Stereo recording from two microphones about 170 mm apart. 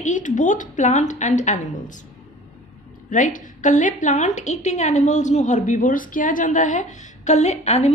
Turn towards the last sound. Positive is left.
turn(degrees=40)  # may be behind; listen again after turning